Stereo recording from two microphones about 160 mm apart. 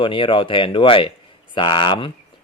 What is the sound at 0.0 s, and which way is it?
Speech, 30° left (ahead or behind).